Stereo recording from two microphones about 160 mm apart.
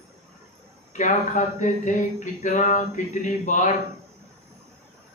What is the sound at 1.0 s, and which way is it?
Speech, 50° left (ahead or behind).